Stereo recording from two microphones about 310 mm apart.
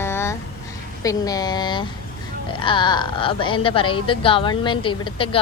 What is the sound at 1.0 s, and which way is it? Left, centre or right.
A woman's voice, centre.